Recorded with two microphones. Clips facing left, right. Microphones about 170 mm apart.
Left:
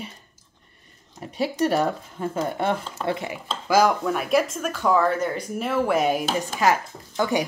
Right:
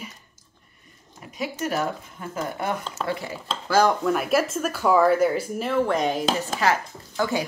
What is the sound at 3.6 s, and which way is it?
Speech, 10° left (ahead or behind).